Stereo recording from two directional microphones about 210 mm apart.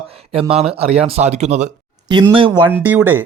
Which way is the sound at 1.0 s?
30° right (ahead or behind).